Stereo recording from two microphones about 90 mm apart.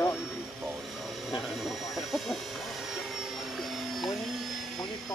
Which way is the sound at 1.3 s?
Centre (ahead or behind).